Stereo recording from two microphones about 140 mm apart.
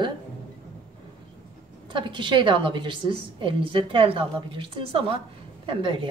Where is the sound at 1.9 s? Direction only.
35° right (ahead or behind).